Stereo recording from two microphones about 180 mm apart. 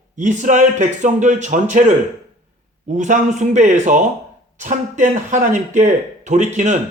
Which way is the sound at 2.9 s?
40° right (ahead or behind).